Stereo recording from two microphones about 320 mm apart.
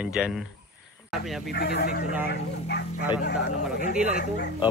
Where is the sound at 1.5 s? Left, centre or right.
Left.